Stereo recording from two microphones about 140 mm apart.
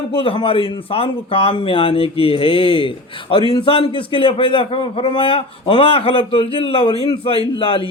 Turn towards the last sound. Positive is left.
turn(degrees=40)  # may be behind; listen again after turning